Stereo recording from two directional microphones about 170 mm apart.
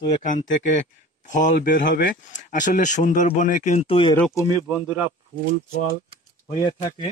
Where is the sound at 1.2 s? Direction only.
45° left (ahead or behind).